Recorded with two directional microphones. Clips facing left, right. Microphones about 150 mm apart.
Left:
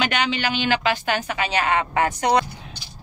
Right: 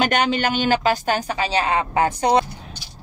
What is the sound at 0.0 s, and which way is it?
A woman's voice, 45° right (ahead or behind).